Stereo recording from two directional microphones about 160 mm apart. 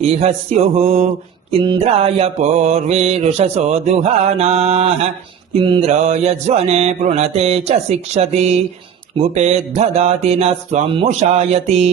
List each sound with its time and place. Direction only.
0.0 s mantra: 40° right (ahead or behind)
5.9 s mantra: 45° right (ahead or behind)